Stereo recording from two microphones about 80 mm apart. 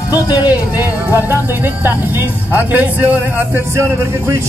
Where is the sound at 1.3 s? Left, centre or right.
Right.